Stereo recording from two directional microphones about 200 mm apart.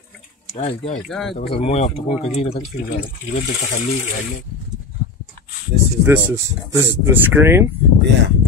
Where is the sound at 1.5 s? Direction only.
30° left (ahead or behind).